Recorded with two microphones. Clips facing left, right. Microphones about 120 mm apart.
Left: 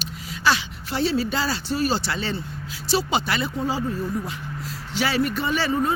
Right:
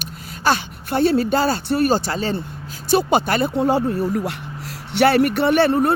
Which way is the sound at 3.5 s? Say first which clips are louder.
Right 7 dB; 70° right (ahead or behind).